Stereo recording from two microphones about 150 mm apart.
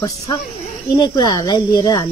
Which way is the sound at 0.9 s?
30° left (ahead or behind).